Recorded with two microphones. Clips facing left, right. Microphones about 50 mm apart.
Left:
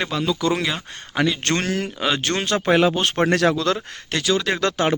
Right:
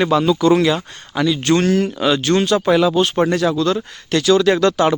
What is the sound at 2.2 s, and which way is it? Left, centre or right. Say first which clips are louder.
Speech: right 5 dB; left.